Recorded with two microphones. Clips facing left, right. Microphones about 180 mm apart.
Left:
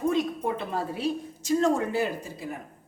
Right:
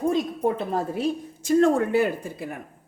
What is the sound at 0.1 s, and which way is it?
A woman's voice, 40° right (ahead or behind).